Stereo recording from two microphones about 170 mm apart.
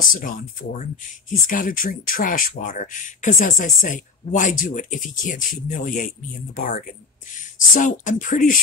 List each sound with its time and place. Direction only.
0.0 s speech: 50° left (ahead or behind)